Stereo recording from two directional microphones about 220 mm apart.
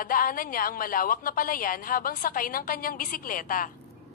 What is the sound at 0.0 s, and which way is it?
A woman's voice, 40° left (ahead or behind).